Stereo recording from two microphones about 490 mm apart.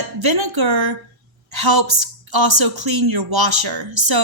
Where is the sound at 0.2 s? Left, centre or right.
Right.